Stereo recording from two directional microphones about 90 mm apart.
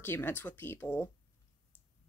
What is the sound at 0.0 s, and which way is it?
Speech, 25° left (ahead or behind).